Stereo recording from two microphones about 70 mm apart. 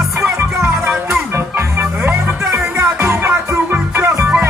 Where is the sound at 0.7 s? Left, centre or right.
Centre.